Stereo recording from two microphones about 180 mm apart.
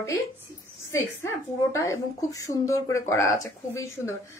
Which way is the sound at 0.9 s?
15° left (ahead or behind).